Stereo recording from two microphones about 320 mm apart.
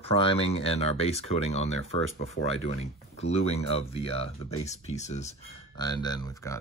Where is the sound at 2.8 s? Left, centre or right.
Centre.